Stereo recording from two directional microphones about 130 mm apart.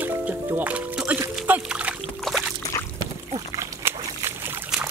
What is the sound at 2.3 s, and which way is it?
Music, 5° left (ahead or behind).